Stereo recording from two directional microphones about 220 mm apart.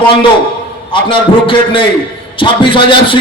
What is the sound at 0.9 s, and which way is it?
A man's voice, 20° left (ahead or behind).